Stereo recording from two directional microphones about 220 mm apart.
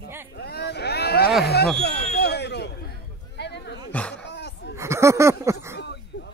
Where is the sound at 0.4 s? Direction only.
45° left (ahead or behind).